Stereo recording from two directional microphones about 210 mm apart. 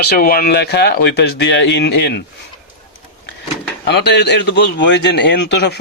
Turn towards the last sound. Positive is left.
turn(degrees=55)  # may be behind; listen again after turning